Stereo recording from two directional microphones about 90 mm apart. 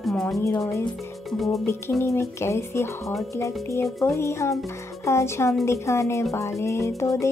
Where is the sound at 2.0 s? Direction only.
30° left (ahead or behind).